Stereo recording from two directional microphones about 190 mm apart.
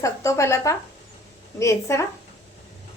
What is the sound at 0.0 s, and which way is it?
A woman's voice, 15° left (ahead or behind).